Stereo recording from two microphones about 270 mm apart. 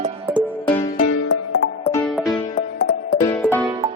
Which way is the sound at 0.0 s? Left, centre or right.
Centre.